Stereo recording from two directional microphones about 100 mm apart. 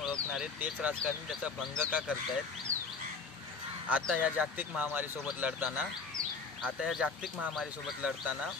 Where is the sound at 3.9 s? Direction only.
15° right (ahead or behind).